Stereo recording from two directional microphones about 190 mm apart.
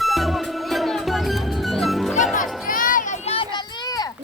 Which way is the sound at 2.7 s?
45° left (ahead or behind).